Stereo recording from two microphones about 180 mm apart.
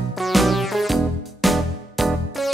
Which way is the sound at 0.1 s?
Centre (ahead or behind).